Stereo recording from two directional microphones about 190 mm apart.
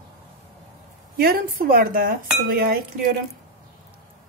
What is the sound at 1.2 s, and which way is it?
A woman's voice, 50° right (ahead or behind).